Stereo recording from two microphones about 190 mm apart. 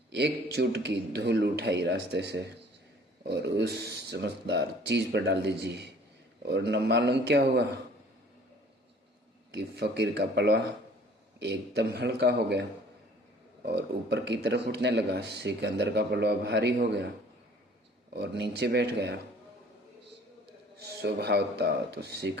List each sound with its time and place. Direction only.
0.1 s a man's voice: 60° right (ahead or behind)
9.5 s a man's voice: 60° right (ahead or behind)
18.1 s a man's voice: 60° right (ahead or behind)
20.7 s a man's voice: 60° right (ahead or behind)